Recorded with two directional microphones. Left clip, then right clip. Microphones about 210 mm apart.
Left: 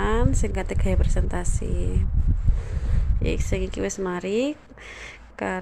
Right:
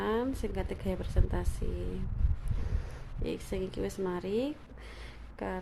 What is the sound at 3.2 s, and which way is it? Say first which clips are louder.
Speech: left 8 dB; 10° left (ahead or behind).